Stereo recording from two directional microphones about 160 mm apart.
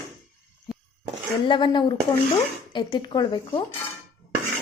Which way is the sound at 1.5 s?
30° left (ahead or behind).